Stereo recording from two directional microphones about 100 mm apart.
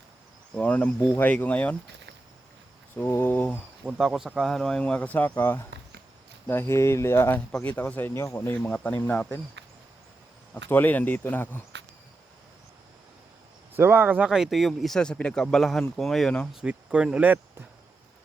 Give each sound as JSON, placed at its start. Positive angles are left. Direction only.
{"t": 0.5, "sound": "speech", "side_deg": 10}
{"t": 2.9, "sound": "speech", "side_deg": 20}
{"t": 3.8, "sound": "speech", "side_deg": -5}
{"t": 8.5, "sound": "speech", "side_deg": 15}
{"t": 10.5, "sound": "speech", "side_deg": 20}
{"t": 13.7, "sound": "speech", "side_deg": -20}
{"t": 14.3, "sound": "speech", "side_deg": -5}
{"t": 16.5, "sound": "speech", "side_deg": -10}